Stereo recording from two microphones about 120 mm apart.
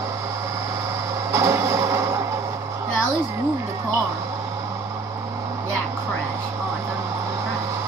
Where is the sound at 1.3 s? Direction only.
25° right (ahead or behind).